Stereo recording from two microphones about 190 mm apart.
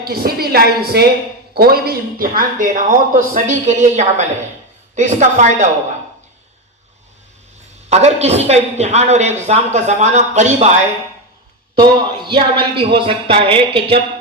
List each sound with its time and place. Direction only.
0.0 s a woman's voice: 55° right (ahead or behind)
7.9 s a man's voice: 35° right (ahead or behind)
12.1 s a woman's voice: 25° right (ahead or behind)